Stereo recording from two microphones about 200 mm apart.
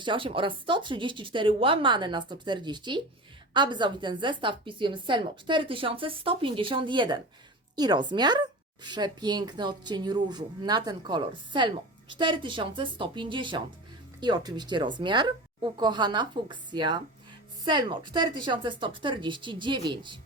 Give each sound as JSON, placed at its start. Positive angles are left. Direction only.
{"t": 0.0, "sound": "a woman's voice", "side_deg": -25}